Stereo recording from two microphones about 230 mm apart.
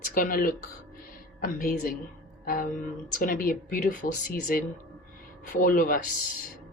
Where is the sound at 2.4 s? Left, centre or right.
Left.